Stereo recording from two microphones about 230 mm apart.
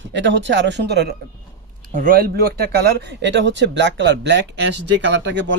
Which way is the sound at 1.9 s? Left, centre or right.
Right.